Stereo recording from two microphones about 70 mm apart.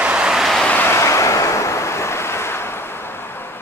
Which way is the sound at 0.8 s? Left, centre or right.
Left.